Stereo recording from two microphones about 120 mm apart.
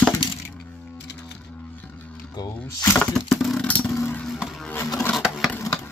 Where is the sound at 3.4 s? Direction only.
10° left (ahead or behind).